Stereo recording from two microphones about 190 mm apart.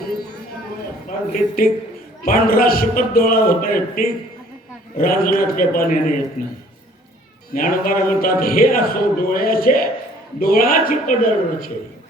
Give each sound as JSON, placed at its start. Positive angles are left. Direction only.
{"t": 1.3, "sound": "a man's voice", "side_deg": 50}
{"t": 7.5, "sound": "a man's voice", "side_deg": 50}